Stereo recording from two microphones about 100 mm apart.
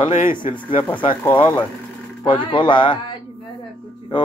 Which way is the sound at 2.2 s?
55° left (ahead or behind).